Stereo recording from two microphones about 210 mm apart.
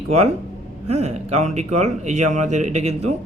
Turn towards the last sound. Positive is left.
turn(degrees=-30)  # may be behind; listen again after turning